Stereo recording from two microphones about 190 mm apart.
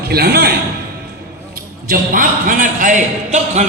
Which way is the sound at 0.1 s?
55° right (ahead or behind).